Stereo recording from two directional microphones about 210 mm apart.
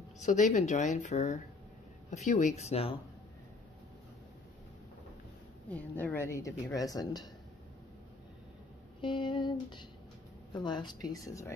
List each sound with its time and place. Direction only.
0.2 s speech: 35° left (ahead or behind)
5.7 s a woman's voice: 10° left (ahead or behind)
9.0 s speech: 25° left (ahead or behind)